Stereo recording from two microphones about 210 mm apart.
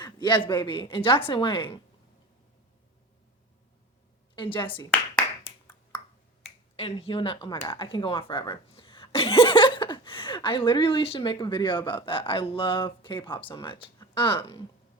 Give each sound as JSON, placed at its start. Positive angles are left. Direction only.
{"t": 0.0, "sound": "speech", "side_deg": 20}
{"t": 4.4, "sound": "speech", "side_deg": 25}
{"t": 4.9, "sound": "clapping", "side_deg": 10}
{"t": 5.5, "sound": "finger snapping", "side_deg": 20}
{"t": 6.7, "sound": "speech", "side_deg": 25}